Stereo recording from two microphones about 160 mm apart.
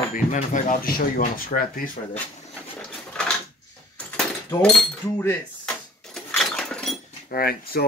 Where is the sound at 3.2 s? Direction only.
5° left (ahead or behind).